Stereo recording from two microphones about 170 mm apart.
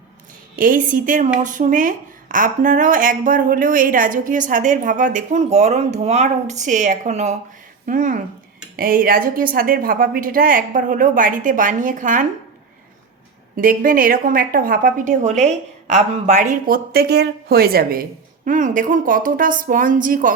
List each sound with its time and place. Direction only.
0.5 s a woman's voice: 55° right (ahead or behind)
13.6 s a woman's voice: 55° right (ahead or behind)
18.4 s a woman's voice: 50° right (ahead or behind)